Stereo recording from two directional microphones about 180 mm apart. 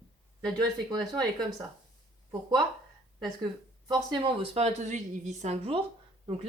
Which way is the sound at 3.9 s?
25° right (ahead or behind).